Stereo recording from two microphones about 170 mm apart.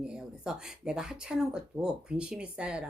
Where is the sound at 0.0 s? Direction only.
5° right (ahead or behind).